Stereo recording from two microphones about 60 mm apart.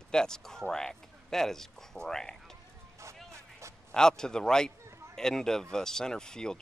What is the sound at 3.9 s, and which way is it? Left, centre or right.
Speech, centre.